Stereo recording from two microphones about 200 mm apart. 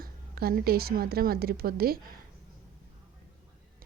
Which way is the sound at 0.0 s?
50° right (ahead or behind).